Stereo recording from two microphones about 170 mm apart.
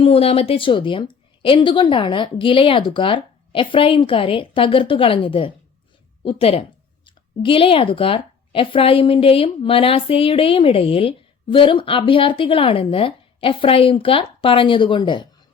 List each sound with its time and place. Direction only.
0.0 s speech: 35° left (ahead or behind)